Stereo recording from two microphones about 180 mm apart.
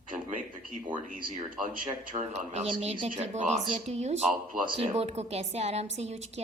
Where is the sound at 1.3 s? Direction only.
45° right (ahead or behind).